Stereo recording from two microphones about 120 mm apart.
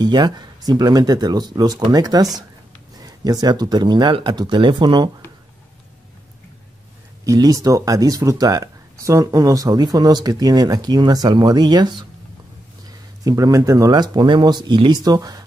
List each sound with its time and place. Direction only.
0.0 s speech: 40° right (ahead or behind)
7.2 s speech: 30° right (ahead or behind)